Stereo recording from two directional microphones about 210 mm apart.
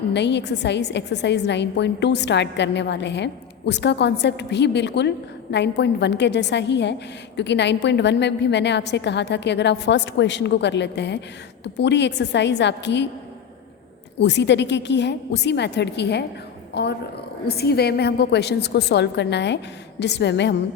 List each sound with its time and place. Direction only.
0.1 s a woman's voice: 55° left (ahead or behind)
14.2 s a woman's voice: 55° left (ahead or behind)
17.6 s a woman's voice: 50° left (ahead or behind)